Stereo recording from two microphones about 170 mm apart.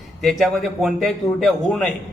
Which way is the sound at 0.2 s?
Centre (ahead or behind).